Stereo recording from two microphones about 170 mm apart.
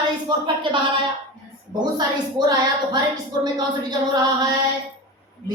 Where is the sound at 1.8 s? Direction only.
25° right (ahead or behind).